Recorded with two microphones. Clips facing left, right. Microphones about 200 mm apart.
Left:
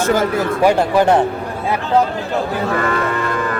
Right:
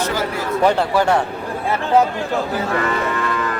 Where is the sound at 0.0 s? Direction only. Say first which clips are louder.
Left 6 dB; 50° left (ahead or behind).